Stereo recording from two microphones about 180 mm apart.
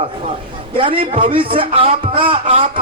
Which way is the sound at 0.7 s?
30° right (ahead or behind).